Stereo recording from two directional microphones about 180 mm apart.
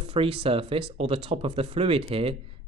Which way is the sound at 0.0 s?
30° right (ahead or behind).